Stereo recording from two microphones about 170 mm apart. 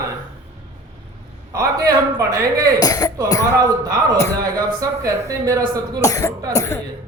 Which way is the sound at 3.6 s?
20° right (ahead or behind).